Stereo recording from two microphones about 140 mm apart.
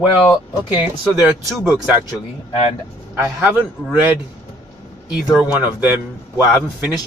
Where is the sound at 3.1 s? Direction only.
15° right (ahead or behind).